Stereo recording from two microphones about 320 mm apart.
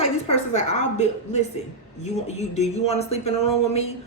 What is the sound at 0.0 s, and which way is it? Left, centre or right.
Speech, centre.